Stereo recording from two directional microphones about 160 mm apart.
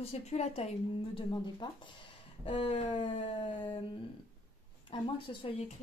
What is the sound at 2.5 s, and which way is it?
Speech, 40° left (ahead or behind).